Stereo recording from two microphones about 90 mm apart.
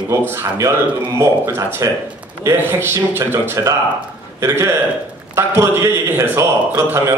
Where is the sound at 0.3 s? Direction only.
30° right (ahead or behind).